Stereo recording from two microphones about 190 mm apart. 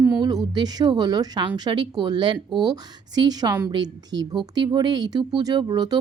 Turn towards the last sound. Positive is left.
turn(degrees=-20)  # may be behind; listen again after turning